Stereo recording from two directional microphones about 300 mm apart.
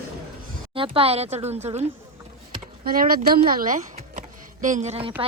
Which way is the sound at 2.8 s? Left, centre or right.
Right.